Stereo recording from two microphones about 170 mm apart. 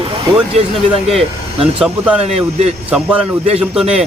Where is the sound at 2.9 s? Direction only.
10° right (ahead or behind).